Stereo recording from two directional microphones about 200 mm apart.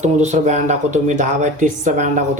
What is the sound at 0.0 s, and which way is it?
Speech, 35° right (ahead or behind).